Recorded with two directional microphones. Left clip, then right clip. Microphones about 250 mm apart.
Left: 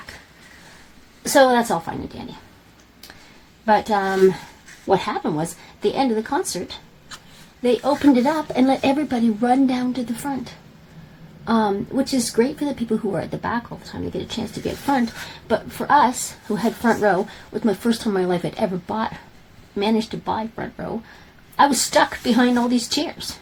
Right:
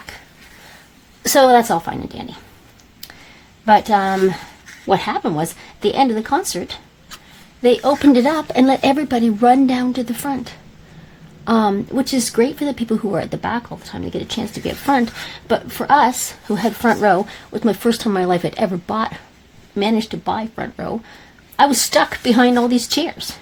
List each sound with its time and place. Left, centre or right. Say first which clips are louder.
1.2 s speech: right 4 dB; right
3.7 s speech: right 5 dB; right